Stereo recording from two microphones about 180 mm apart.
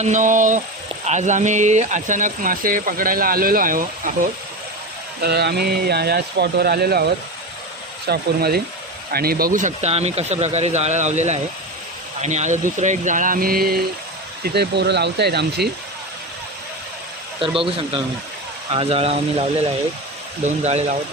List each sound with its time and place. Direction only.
0.0 s speech: 45° right (ahead or behind)
5.2 s speech: 65° right (ahead or behind)
17.6 s a man's voice: 30° right (ahead or behind)